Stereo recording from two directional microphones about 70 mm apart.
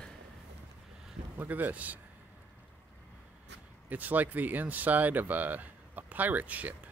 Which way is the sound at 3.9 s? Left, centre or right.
Right.